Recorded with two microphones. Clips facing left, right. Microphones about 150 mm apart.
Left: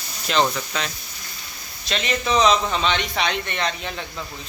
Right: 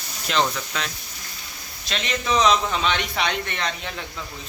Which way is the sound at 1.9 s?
Centre (ahead or behind).